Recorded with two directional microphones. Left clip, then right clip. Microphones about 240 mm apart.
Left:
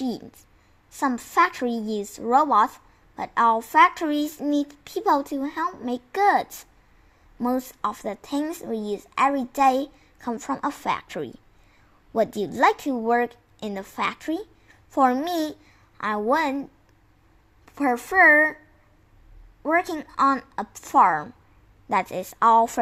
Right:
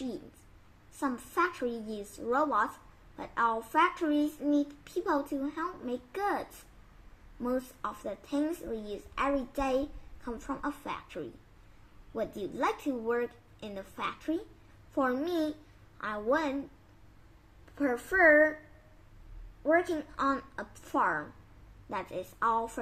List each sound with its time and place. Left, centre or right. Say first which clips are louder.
0.9 s speech: left 10 dB; left
7.4 s speech: left 8 dB; left
17.7 s speech: left 9 dB; left
19.6 s speech: left 5 dB; left